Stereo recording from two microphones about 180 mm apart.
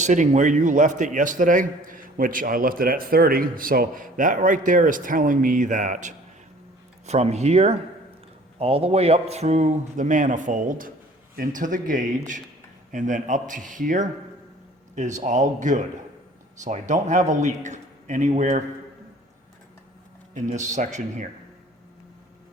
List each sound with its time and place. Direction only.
0.0 s a man's voice: 40° right (ahead or behind)
20.3 s speech: 40° right (ahead or behind)